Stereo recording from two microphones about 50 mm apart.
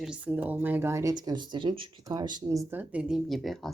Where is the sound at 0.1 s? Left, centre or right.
Right.